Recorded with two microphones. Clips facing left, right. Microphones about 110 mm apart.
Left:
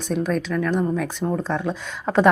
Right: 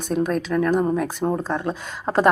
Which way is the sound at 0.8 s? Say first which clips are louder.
Right 2 dB; 35° right (ahead or behind).